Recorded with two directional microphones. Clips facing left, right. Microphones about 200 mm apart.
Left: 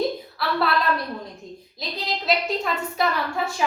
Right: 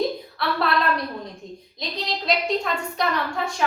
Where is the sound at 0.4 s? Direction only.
Centre (ahead or behind).